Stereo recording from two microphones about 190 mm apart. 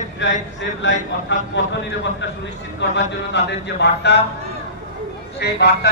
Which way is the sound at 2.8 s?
65° left (ahead or behind).